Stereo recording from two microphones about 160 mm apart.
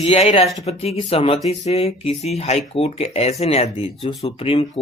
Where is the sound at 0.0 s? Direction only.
35° left (ahead or behind).